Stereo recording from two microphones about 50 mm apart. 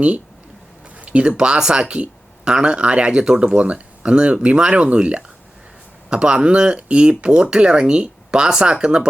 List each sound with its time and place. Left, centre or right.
1.0 s speech: right